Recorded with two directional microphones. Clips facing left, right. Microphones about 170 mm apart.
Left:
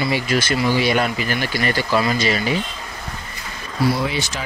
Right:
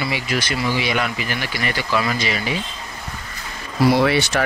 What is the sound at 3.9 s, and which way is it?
Speech, 70° right (ahead or behind).